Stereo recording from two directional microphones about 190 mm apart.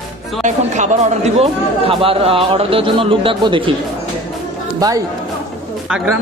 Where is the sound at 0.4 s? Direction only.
35° right (ahead or behind).